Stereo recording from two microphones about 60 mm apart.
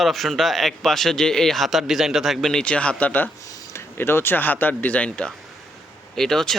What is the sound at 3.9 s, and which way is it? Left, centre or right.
Speech, left.